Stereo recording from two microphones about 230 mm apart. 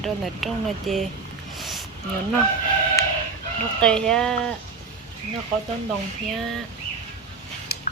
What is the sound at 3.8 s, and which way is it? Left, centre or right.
Speech, centre.